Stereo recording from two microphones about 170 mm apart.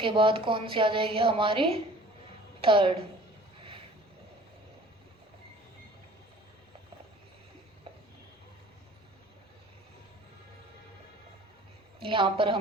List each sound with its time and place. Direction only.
0.0 s a woman's voice: 30° right (ahead or behind)
12.0 s a woman's voice: 30° right (ahead or behind)